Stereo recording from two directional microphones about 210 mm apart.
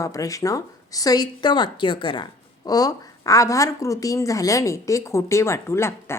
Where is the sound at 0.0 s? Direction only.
15° left (ahead or behind).